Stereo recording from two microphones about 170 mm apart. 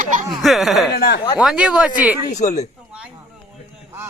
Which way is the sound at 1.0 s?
70° left (ahead or behind).